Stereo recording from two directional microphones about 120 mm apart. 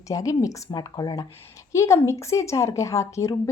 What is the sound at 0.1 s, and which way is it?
A woman's voice, 30° left (ahead or behind).